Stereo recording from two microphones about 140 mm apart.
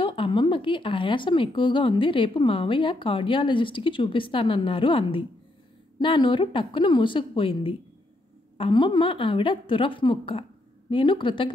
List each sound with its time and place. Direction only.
0.0 s a woman's voice: 40° left (ahead or behind)